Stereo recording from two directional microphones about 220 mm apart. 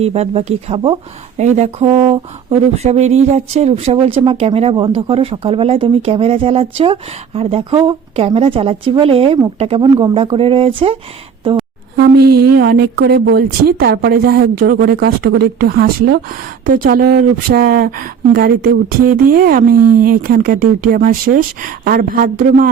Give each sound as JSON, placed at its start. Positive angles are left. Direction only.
{"t": 0.0, "sound": "speech", "side_deg": -30}
{"t": 11.9, "sound": "speech", "side_deg": -45}